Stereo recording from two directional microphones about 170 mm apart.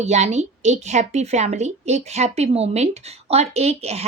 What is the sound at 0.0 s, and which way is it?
A woman's voice, 40° right (ahead or behind).